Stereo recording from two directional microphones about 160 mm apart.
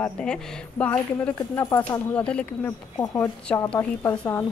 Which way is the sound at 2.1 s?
5° left (ahead or behind).